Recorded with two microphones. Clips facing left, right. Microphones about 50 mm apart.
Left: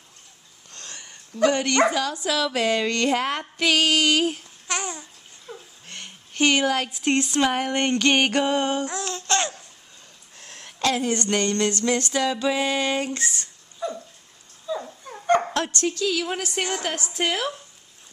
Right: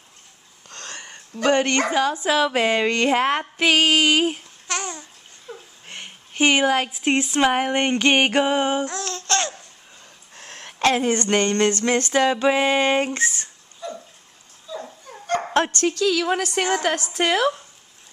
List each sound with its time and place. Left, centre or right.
0.7 s a sound: right
1.3 s speech: right
4.6 s babbling: centre
5.5 s a sound: centre
5.9 s speech: centre
8.8 s babbling: centre
10.3 s a woman's voice: right
13.8 s water: left
15.0 s dog: left
15.5 s speech: right
16.1 s a woman's voice: right